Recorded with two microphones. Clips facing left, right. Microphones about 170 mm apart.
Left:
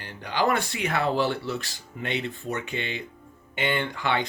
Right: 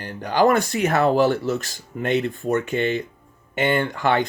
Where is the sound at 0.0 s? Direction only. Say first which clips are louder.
Right 7 dB; 45° right (ahead or behind).